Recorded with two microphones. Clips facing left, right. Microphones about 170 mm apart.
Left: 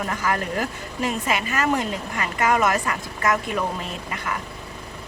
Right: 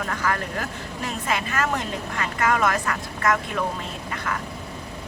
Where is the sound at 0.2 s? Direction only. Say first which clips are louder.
Left 3 dB; 15° left (ahead or behind).